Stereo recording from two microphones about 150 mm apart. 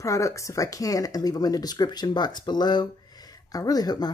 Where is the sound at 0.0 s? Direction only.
20° left (ahead or behind).